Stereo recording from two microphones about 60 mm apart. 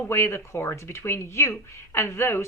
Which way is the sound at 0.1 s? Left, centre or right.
Left.